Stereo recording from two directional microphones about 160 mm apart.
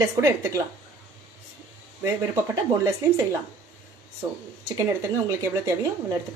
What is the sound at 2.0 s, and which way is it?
Speech, 15° right (ahead or behind).